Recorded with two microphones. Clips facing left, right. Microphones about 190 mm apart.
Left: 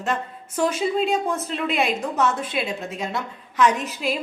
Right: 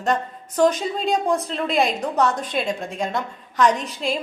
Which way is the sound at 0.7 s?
35° right (ahead or behind).